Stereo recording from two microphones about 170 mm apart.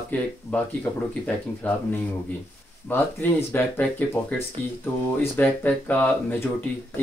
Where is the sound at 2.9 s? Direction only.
10° left (ahead or behind).